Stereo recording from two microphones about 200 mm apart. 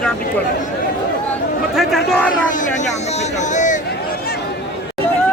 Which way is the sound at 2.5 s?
40° left (ahead or behind).